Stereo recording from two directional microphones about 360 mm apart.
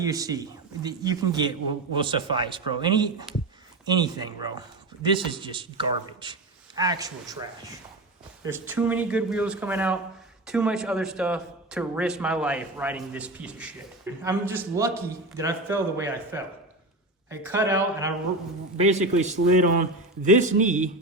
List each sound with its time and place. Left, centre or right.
0.0 s a man's voice: centre
18.8 s a man's voice: centre